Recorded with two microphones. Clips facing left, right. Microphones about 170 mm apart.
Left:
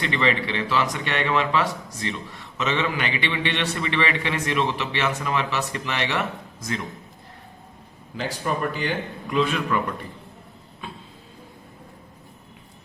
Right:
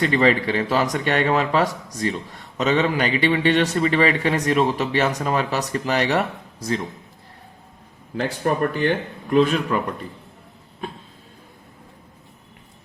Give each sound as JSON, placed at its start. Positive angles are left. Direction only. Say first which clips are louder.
{"t": 0.0, "sound": "a man's voice", "louder": "right 6 dB", "side_deg": -40}
{"t": 8.1, "sound": "a man's voice", "louder": "right 5 dB", "side_deg": -55}